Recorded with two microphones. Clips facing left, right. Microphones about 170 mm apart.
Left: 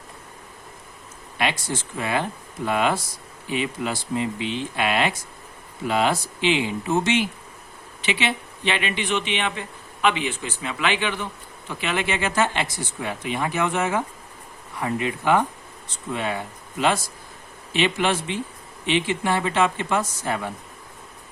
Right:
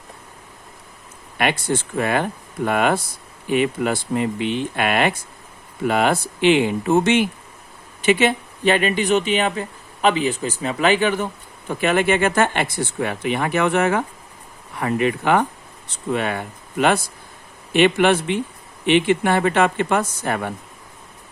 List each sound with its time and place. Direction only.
1.4 s speech: 55° right (ahead or behind)